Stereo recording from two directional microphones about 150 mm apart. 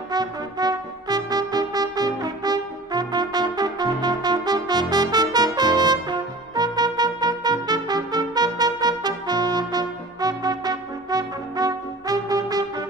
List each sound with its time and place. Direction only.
0.1 s brass instrument: 25° right (ahead or behind)